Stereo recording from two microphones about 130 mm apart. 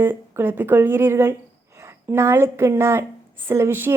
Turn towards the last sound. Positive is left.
turn(degrees=-15)  # may be behind; listen again after turning